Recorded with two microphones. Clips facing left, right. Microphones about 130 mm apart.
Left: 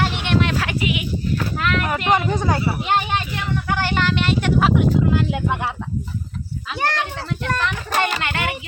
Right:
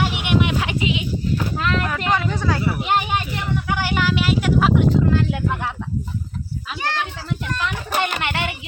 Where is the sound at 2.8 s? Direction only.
10° right (ahead or behind).